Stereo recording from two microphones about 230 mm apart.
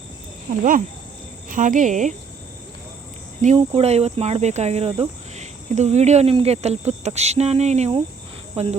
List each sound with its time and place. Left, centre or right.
1.5 s speech: right
3.4 s speech: right